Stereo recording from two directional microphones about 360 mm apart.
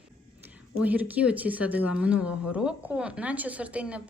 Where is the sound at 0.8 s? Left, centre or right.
Centre.